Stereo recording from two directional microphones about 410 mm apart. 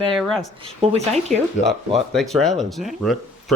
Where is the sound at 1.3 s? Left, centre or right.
Centre.